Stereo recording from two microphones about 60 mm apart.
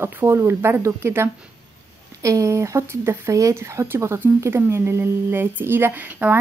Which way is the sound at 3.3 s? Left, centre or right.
Right.